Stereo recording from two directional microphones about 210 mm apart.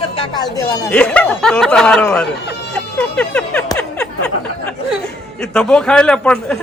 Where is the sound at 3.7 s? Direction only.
5° left (ahead or behind).